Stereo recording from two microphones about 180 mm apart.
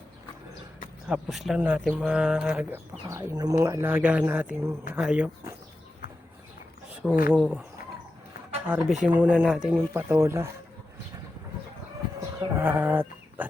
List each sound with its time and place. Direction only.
1.0 s speech: 5° right (ahead or behind)
3.1 s speech: 20° right (ahead or behind)
7.0 s speech: centre (ahead or behind)
8.6 s speech: 5° right (ahead or behind)
12.2 s livestock: 15° right (ahead or behind)